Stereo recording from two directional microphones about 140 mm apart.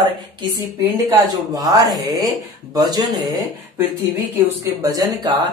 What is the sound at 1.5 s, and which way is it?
Speech, 25° right (ahead or behind).